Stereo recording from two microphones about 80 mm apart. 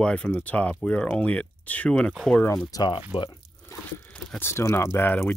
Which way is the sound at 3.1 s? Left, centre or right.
Left.